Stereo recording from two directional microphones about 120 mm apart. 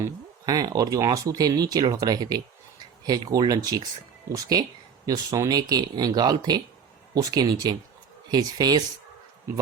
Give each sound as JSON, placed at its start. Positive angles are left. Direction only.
{"t": 0.0, "sound": "speech", "side_deg": -30}